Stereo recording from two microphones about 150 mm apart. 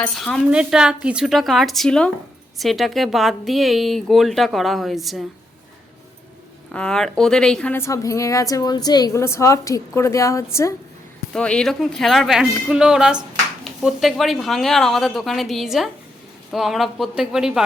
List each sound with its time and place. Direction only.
0.2 s speech: 5° left (ahead or behind)
6.7 s a woman's voice: 5° left (ahead or behind); by 10.8 s 20° left (ahead or behind)
11.3 s speech: 5° left (ahead or behind)